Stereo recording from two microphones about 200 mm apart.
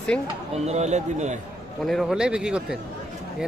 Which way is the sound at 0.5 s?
35° right (ahead or behind).